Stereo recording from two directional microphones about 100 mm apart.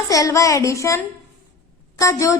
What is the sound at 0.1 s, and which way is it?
A woman's voice, 35° left (ahead or behind).